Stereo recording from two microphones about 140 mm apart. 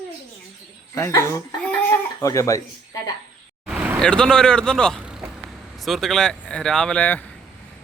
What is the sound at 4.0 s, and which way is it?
Speech, 5° left (ahead or behind).